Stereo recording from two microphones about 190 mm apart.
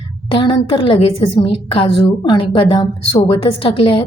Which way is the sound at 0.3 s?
25° left (ahead or behind).